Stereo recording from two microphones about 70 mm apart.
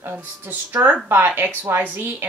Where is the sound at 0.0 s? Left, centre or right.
Right.